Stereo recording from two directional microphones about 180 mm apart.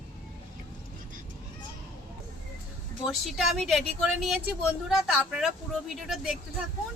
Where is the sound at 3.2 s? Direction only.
Centre (ahead or behind).